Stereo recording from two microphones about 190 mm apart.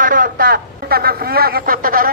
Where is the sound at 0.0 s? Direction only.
45° right (ahead or behind).